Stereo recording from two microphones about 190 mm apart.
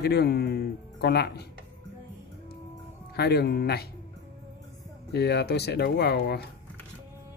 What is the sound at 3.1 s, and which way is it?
Speech, 55° left (ahead or behind).